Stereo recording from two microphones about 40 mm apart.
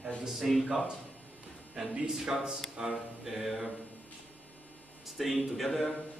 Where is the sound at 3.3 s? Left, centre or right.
Centre.